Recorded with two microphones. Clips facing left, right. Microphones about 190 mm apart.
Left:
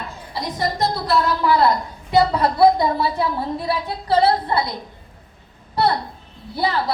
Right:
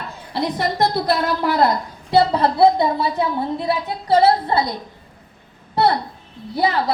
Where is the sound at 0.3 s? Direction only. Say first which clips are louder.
Right 3 dB; 60° right (ahead or behind).